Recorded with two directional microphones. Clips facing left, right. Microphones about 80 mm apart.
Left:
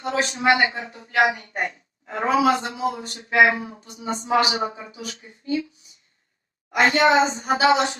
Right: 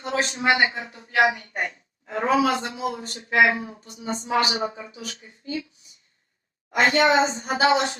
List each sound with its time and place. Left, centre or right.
0.0 s a man's voice: left
6.7 s speech: left